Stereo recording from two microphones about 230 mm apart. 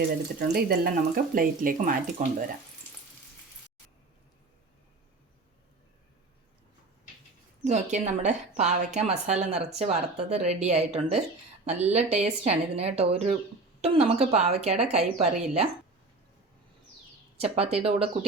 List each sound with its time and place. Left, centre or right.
0.3 s speech: right
7.6 s a woman's voice: right
17.3 s a woman's voice: right